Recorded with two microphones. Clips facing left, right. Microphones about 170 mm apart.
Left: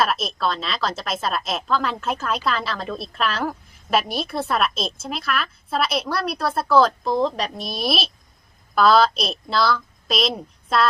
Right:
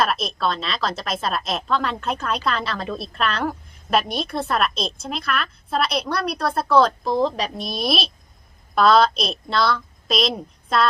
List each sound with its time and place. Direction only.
0.0 s a woman's voice: centre (ahead or behind)